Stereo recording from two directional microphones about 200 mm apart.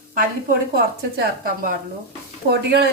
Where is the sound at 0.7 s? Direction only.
50° right (ahead or behind).